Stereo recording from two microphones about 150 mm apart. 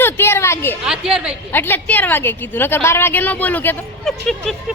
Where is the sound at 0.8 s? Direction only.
5° right (ahead or behind).